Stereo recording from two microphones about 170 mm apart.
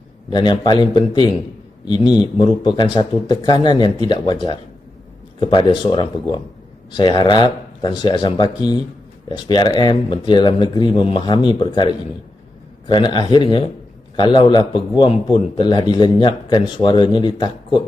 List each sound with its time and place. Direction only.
0.3 s speech: 25° left (ahead or behind)
5.4 s speech: 30° left (ahead or behind)
12.9 s speech: 25° left (ahead or behind)